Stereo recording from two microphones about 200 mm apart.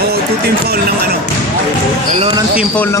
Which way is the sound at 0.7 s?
50° right (ahead or behind).